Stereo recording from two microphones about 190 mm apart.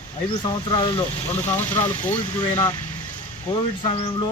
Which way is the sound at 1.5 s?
10° left (ahead or behind).